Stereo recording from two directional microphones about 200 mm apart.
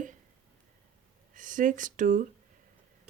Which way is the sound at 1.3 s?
40° right (ahead or behind).